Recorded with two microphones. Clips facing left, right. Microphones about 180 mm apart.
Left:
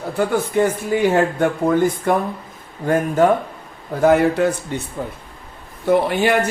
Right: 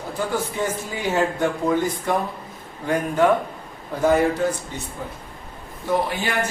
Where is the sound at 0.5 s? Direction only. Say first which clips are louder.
Left 9 dB; 60° left (ahead or behind).